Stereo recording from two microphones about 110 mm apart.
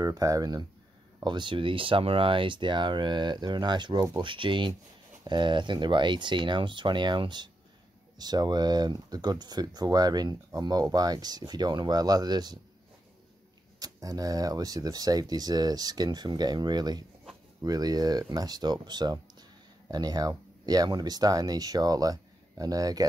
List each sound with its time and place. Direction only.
0.0 s speech: 30° right (ahead or behind)
13.7 s speech: 35° right (ahead or behind)